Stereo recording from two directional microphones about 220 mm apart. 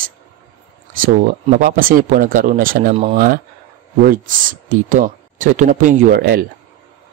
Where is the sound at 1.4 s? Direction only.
35° right (ahead or behind).